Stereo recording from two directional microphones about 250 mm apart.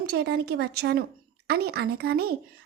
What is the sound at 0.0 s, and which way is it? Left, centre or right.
Speech, right.